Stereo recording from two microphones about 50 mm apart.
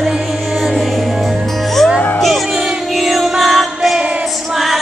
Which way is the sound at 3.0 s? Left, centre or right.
Centre.